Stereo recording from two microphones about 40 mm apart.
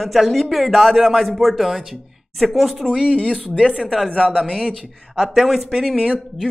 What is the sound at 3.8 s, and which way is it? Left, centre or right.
Speech, centre.